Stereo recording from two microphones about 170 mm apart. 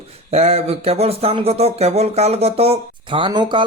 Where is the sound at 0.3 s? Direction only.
40° right (ahead or behind).